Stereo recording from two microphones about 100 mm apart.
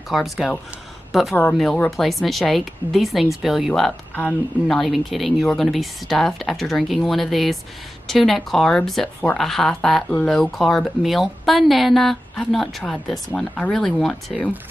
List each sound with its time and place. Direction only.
0.1 s speech: centre (ahead or behind)
1.3 s speech: 10° left (ahead or behind)
4.1 s speech: 10° left (ahead or behind)